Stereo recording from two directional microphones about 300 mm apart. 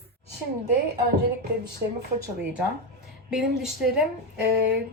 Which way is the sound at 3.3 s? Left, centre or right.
Centre.